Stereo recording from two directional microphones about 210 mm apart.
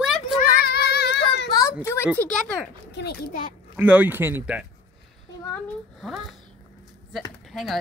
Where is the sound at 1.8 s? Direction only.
10° left (ahead or behind).